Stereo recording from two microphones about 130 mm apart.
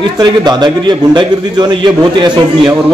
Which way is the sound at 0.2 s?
35° right (ahead or behind).